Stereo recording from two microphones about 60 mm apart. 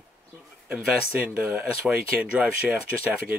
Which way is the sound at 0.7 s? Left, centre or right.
Right.